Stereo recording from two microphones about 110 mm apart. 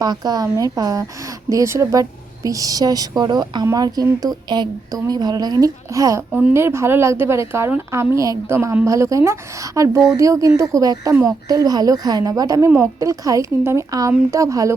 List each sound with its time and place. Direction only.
0.0 s a woman's voice: 35° right (ahead or behind)
6.3 s a woman's voice: 20° right (ahead or behind)